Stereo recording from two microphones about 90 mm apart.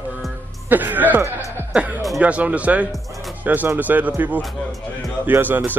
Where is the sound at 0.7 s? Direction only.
20° right (ahead or behind).